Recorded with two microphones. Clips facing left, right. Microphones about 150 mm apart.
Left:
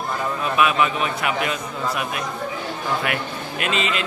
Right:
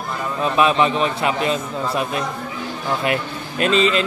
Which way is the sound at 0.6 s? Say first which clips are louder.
Right 3 dB; 30° right (ahead or behind).